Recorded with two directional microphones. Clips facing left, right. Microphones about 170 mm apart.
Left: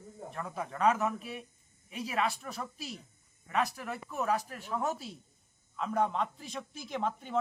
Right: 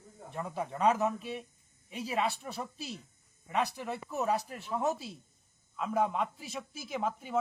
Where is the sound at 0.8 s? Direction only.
30° right (ahead or behind).